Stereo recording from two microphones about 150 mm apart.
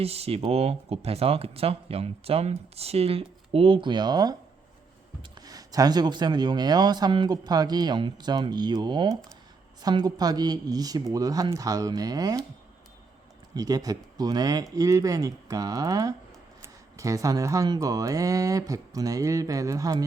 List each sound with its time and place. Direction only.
0.0 s speech: 40° right (ahead or behind); by 12.5 s 25° right (ahead or behind)
13.5 s speech: 25° right (ahead or behind)